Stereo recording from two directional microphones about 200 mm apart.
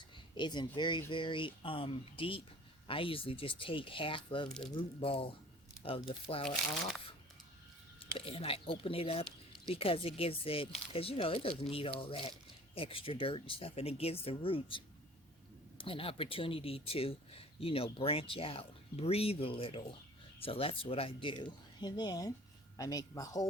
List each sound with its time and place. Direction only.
0.3 s speech: 20° left (ahead or behind)
4.4 s speech: 5° left (ahead or behind)
4.9 s speech: 25° left (ahead or behind)
8.3 s speech: 30° left (ahead or behind)